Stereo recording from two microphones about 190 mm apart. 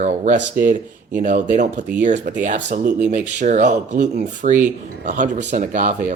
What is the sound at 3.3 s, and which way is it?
Speech, 40° right (ahead or behind).